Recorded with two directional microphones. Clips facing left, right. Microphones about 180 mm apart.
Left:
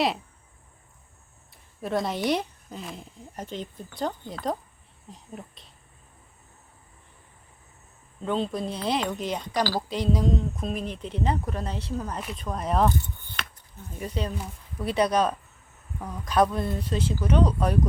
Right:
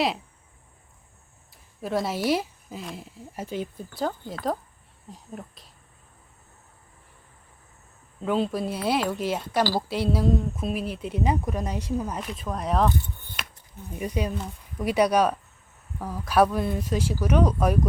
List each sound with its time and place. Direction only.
1.8 s speech: centre (ahead or behind)
8.2 s speech: 5° right (ahead or behind)
12.2 s speech: centre (ahead or behind)
14.0 s speech: 10° right (ahead or behind)